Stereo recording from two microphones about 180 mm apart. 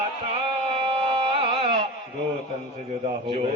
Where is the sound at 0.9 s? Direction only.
30° right (ahead or behind).